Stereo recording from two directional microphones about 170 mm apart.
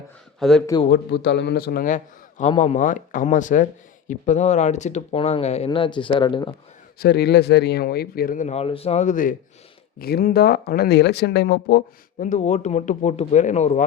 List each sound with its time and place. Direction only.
0.3 s speech: centre (ahead or behind)
0.9 s speech: 75° left (ahead or behind); by 2.0 s 60° left (ahead or behind)
2.4 s speech: 40° left (ahead or behind)
7.0 s speech: 70° left (ahead or behind); by 9.3 s 50° left (ahead or behind)
10.0 s speech: 65° left (ahead or behind)
12.2 s speech: 45° left (ahead or behind)